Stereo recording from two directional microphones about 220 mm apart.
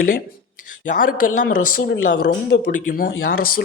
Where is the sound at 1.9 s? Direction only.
45° left (ahead or behind).